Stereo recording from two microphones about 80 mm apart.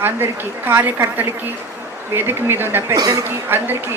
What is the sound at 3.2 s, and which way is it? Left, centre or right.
Speech, right.